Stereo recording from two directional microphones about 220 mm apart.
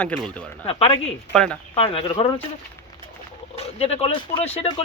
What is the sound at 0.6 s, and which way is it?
Speech, 25° left (ahead or behind).